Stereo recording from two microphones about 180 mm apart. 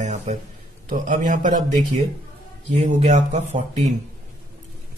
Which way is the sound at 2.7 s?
40° right (ahead or behind).